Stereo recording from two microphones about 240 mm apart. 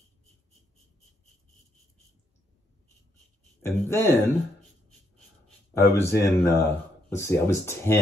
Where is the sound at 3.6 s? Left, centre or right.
Centre.